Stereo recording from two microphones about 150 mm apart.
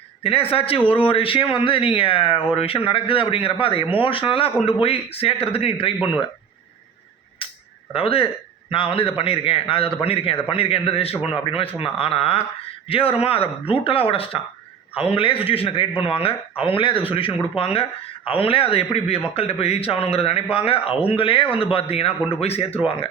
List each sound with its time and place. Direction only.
0.2 s a man's voice: 40° left (ahead or behind)
7.4 s a sound: 35° left (ahead or behind)
7.9 s a man's voice: 40° left (ahead or behind)